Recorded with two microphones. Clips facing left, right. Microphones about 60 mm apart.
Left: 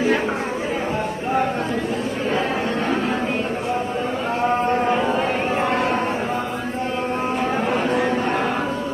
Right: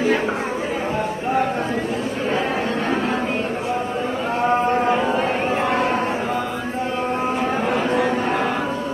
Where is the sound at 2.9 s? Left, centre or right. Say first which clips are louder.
Right 1 dB; centre.